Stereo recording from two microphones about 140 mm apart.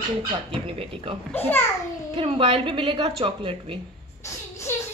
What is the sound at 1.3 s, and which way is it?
Speech, 15° left (ahead or behind).